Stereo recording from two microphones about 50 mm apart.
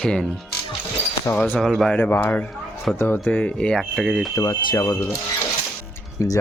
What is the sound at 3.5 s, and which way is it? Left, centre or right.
Speech, left.